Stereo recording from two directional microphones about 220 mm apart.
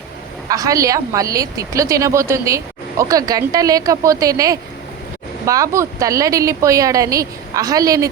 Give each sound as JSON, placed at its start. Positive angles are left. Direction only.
{"t": 0.4, "sound": "a woman's voice", "side_deg": -15}